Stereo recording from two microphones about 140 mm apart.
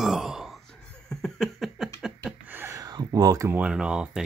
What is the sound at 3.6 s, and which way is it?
Speech, 5° right (ahead or behind).